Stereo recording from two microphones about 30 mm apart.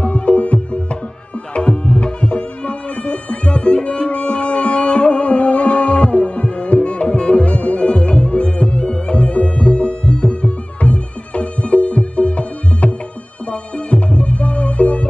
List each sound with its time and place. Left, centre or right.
0.0 s music: left
1.5 s tabla: left
8.9 s music: left